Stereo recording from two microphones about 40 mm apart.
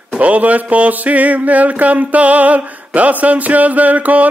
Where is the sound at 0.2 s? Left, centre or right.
Right.